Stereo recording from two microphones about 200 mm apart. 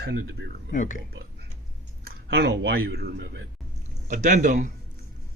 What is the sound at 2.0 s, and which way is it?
Speech, 55° right (ahead or behind).